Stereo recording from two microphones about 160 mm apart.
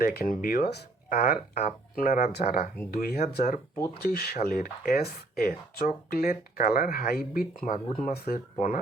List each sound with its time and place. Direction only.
0.0 s speech: 65° left (ahead or behind)
8.0 s speech: 75° left (ahead or behind)
8.5 s speech: 55° left (ahead or behind)